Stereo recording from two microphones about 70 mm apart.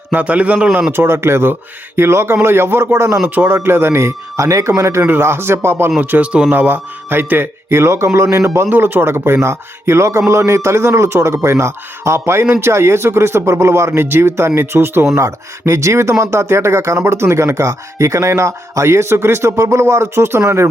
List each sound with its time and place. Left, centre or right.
0.1 s a man's voice: right
0.9 s speech: right
3.2 s speech: right
6.0 s a man's voice: right
8.7 s speech: right